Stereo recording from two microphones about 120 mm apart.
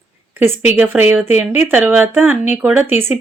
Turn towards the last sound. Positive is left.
turn(degrees=-20)  # may be behind; listen again after turning